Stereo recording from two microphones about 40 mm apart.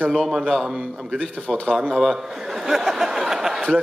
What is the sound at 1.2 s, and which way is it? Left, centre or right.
Speech, centre.